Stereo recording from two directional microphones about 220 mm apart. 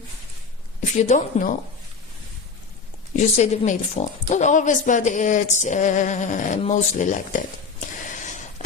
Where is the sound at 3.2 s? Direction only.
30° left (ahead or behind).